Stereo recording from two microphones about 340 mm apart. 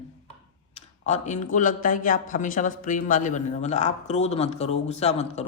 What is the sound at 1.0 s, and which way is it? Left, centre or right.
A man's voice, left.